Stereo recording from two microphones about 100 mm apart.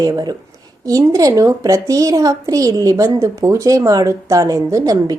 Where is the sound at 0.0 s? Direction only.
40° right (ahead or behind).